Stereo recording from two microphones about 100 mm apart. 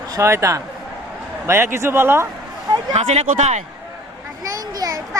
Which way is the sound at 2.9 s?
90° right.